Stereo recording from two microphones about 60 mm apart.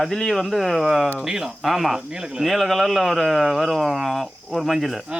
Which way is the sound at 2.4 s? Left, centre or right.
Centre.